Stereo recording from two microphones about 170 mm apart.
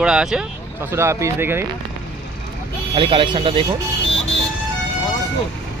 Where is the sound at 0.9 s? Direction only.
15° right (ahead or behind).